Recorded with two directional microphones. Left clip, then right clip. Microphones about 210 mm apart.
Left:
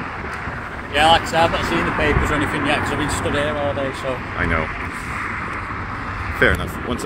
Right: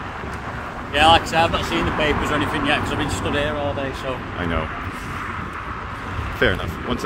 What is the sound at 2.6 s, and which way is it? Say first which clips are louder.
Speech: left 1 dB; 20° left (ahead or behind).